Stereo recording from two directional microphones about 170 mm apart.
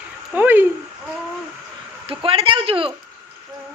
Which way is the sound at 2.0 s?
35° right (ahead or behind).